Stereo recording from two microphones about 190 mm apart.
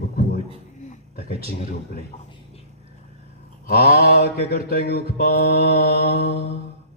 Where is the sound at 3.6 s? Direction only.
55° left (ahead or behind).